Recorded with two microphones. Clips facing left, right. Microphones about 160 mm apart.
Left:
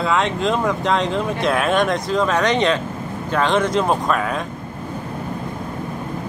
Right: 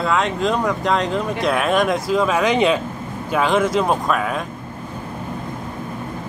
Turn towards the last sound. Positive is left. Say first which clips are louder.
# even
turn(degrees=0)  # may be behind; listen again after turning